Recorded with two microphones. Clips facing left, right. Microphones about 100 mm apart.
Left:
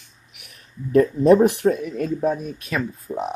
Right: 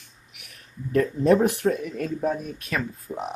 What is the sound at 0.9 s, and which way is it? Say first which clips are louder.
Speech: left 5 dB; 20° left (ahead or behind).